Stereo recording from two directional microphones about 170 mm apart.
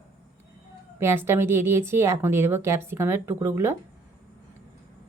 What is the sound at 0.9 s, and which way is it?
A woman's voice, 15° right (ahead or behind).